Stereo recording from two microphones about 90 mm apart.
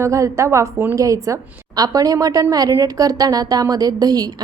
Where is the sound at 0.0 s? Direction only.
35° right (ahead or behind).